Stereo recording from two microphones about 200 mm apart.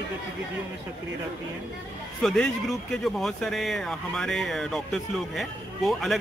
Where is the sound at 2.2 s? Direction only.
Centre (ahead or behind).